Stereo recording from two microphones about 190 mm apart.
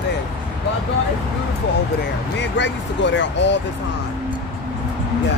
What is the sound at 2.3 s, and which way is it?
Speech, 70° left (ahead or behind).